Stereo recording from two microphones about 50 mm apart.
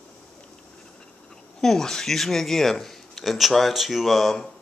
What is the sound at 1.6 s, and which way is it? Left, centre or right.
Speech, centre.